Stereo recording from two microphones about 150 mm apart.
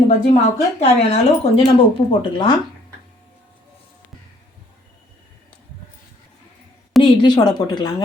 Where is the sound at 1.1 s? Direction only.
40° left (ahead or behind).